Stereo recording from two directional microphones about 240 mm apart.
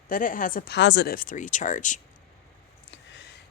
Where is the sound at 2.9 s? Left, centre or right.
Left.